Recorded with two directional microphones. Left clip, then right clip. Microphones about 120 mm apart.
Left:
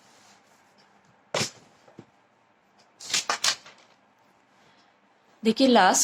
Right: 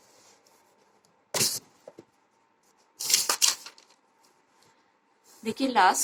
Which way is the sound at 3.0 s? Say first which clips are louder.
Right 1 dB; 25° left (ahead or behind).